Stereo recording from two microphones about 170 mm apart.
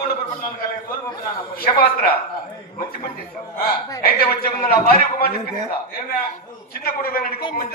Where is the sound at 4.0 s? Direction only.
60° left (ahead or behind).